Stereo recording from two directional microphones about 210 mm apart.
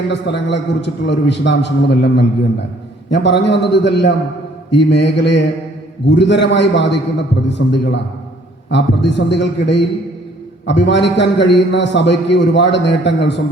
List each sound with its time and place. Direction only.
0.1 s a man's voice: 55° left (ahead or behind)